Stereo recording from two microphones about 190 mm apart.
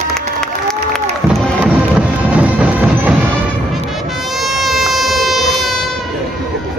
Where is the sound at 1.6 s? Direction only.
5° right (ahead or behind).